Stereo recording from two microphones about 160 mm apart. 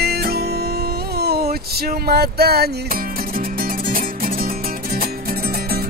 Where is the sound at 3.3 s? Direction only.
65° right (ahead or behind).